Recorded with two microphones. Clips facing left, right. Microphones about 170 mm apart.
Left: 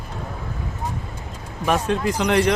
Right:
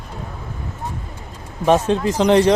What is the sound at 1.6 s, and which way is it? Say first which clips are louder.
Speech: right 5 dB; 30° right (ahead or behind).